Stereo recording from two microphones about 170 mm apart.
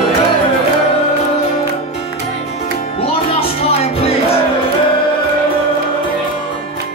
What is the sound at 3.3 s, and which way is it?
Music, 35° left (ahead or behind).